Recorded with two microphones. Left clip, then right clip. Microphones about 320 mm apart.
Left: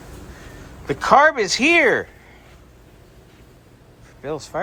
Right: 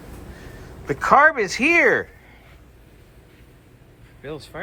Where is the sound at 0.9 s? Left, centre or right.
Centre.